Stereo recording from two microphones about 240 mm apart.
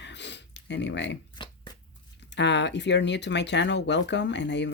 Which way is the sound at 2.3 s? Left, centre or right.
Left.